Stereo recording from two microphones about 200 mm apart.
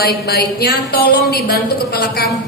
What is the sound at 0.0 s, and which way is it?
Speech, 50° left (ahead or behind).